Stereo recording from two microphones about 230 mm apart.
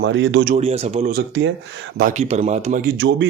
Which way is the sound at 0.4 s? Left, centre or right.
Right.